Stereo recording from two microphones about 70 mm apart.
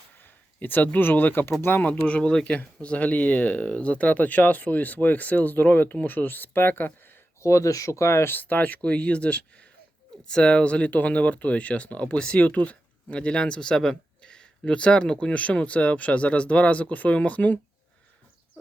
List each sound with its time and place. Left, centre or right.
0.2 s speech: left
7.4 s speech: left